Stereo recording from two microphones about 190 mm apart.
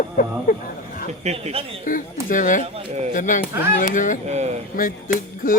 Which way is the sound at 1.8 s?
45° left (ahead or behind).